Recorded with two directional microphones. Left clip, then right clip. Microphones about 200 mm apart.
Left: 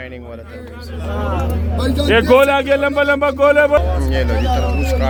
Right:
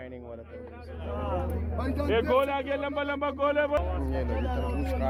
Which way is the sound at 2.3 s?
50° left (ahead or behind).